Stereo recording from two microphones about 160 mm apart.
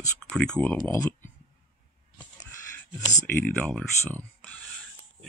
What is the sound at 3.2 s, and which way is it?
Speech, 15° left (ahead or behind).